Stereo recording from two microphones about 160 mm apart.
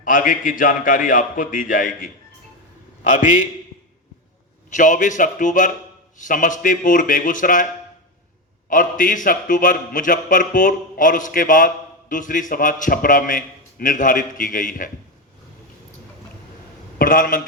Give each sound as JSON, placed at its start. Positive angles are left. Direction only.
{"t": 0.0, "sound": "a man's voice", "side_deg": 55}
{"t": 4.7, "sound": "a man's voice", "side_deg": 55}
{"t": 8.7, "sound": "a man's voice", "side_deg": 55}
{"t": 17.0, "sound": "a man's voice", "side_deg": 60}